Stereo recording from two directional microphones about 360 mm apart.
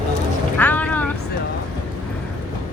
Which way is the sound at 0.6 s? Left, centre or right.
Centre.